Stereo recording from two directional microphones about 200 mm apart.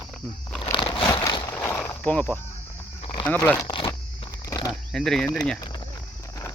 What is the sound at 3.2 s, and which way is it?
Speech, 10° left (ahead or behind).